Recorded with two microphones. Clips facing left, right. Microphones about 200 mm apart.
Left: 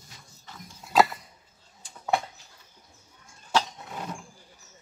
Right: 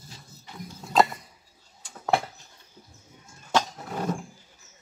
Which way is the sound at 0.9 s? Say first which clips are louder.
Even; centre (ahead or behind).